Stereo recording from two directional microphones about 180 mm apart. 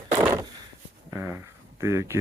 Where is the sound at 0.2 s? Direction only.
15° right (ahead or behind).